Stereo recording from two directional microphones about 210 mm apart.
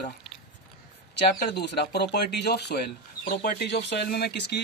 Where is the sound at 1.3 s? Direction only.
50° left (ahead or behind).